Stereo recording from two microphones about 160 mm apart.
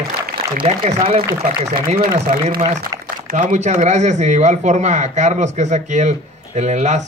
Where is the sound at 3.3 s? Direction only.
50° right (ahead or behind).